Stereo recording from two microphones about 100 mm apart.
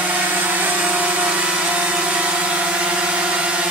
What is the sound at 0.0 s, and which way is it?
Vacuum cleaner, 15° right (ahead or behind).